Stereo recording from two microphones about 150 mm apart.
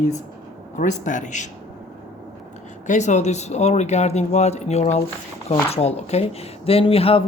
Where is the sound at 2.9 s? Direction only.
50° left (ahead or behind).